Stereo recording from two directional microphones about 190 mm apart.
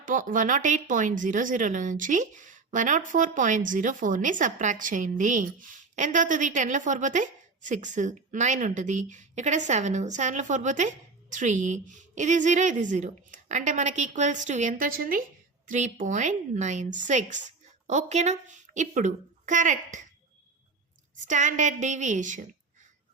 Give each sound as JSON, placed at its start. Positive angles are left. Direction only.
{"t": 0.0, "sound": "speech", "side_deg": -45}
{"t": 21.2, "sound": "speech", "side_deg": -40}